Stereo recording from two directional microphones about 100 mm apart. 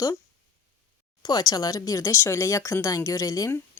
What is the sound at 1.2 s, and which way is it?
Speech, 40° left (ahead or behind).